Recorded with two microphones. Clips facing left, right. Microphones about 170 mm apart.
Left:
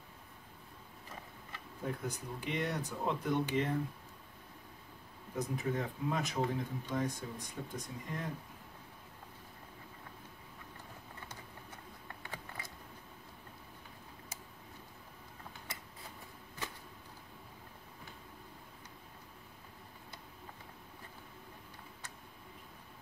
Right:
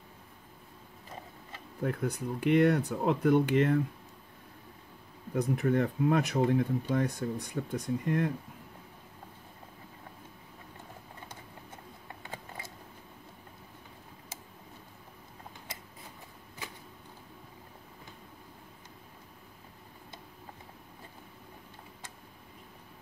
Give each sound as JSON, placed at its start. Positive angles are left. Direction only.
{"t": 1.8, "sound": "speech", "side_deg": -65}
{"t": 5.3, "sound": "speech", "side_deg": -65}
{"t": 12.3, "sound": "a sound", "side_deg": -25}